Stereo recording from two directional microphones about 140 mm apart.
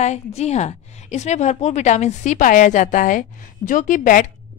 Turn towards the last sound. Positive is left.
turn(degrees=65)  # may be behind; listen again after turning